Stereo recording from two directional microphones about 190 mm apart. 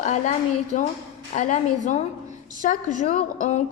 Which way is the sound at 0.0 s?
40° left (ahead or behind).